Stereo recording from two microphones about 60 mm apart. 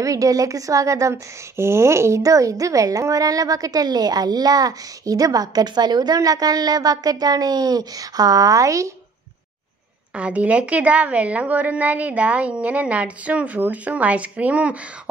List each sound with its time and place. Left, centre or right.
0.0 s speech: right
1.6 s a woman's voice: right
10.1 s a woman's voice: right